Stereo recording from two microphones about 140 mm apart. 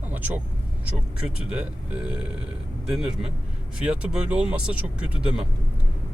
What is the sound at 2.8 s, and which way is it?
A man's voice, 5° right (ahead or behind).